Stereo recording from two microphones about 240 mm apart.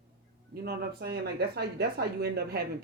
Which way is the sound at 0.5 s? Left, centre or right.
Right.